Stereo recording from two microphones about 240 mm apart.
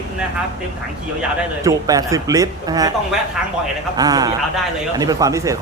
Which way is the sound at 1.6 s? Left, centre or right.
Centre.